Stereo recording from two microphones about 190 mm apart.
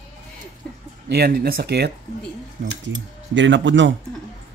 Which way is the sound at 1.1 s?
55° right (ahead or behind).